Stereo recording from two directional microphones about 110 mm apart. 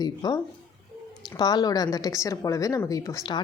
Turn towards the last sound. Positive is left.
turn(degrees=35)  # may be behind; listen again after turning